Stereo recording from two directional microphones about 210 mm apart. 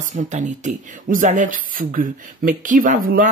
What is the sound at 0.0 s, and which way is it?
Speech, 35° right (ahead or behind).